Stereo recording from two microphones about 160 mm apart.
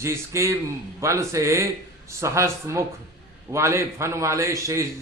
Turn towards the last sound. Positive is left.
turn(degrees=-20)  # may be behind; listen again after turning